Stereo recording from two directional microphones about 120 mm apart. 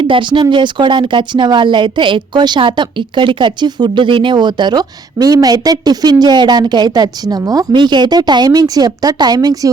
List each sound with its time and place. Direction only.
0.0 s a woman's voice: 45° right (ahead or behind)